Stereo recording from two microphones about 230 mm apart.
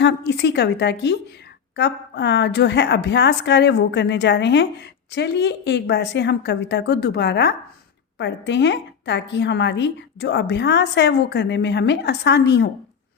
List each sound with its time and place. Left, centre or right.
0.0 s a woman's voice: left